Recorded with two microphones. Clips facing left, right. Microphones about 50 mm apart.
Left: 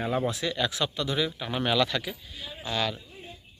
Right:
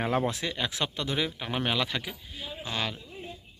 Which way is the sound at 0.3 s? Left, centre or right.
Right.